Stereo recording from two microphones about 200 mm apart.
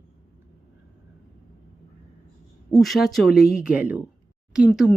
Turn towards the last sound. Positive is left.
turn(degrees=0)  # may be behind; listen again after turning